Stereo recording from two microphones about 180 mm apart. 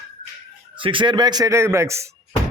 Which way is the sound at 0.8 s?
30° right (ahead or behind).